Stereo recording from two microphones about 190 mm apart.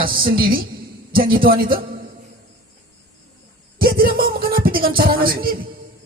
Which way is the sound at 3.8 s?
50° right (ahead or behind).